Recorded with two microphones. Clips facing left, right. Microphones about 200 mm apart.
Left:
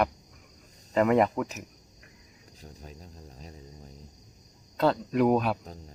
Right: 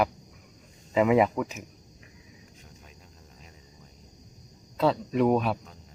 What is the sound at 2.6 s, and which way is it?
Cricket, 35° left (ahead or behind).